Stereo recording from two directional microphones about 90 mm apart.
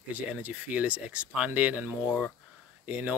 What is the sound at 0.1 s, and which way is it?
Speech, 15° right (ahead or behind).